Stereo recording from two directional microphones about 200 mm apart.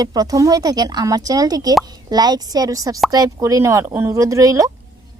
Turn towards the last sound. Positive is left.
turn(degrees=-15)  # may be behind; listen again after turning